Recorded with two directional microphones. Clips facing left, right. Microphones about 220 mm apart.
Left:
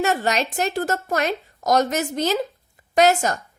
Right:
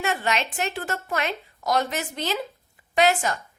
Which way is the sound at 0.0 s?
40° left (ahead or behind).